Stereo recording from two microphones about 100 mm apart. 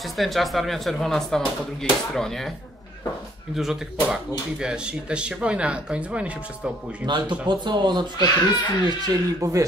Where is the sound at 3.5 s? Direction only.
5° right (ahead or behind).